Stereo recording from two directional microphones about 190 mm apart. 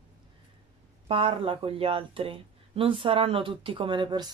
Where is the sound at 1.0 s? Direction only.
30° right (ahead or behind).